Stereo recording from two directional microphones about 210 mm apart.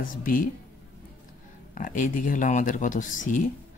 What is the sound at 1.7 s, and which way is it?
Speech, 40° left (ahead or behind).